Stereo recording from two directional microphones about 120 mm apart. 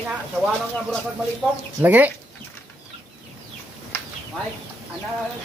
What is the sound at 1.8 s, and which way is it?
Speech, 15° right (ahead or behind).